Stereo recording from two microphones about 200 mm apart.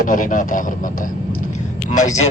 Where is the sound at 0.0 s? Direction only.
40° left (ahead or behind).